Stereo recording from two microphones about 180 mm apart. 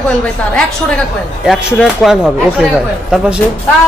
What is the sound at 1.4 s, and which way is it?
Speech, centre (ahead or behind).